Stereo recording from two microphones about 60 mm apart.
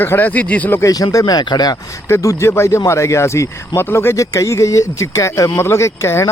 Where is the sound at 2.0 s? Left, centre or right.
Left.